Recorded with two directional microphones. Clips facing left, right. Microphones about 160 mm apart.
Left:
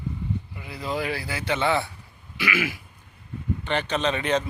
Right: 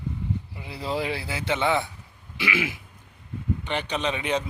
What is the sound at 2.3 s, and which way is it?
Throat clearing, 25° right (ahead or behind).